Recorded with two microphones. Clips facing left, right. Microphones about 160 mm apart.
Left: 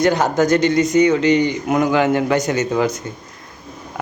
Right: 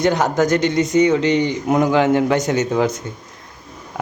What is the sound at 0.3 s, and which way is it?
A man's voice, 15° right (ahead or behind).